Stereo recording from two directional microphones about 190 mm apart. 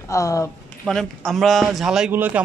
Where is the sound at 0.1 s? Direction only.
15° left (ahead or behind).